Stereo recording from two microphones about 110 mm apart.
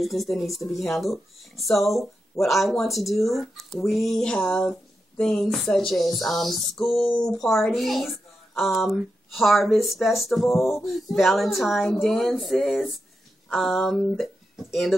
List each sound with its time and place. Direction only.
0.0 s speech: centre (ahead or behind)
7.0 s speech: 50° left (ahead or behind)
7.2 s speech: 5° left (ahead or behind)